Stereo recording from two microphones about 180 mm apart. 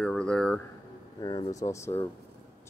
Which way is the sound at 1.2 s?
20° left (ahead or behind).